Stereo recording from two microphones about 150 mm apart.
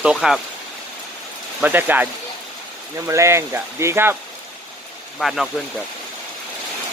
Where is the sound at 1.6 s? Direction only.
10° right (ahead or behind).